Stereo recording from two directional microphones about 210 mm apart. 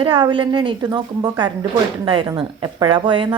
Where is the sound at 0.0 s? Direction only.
25° right (ahead or behind).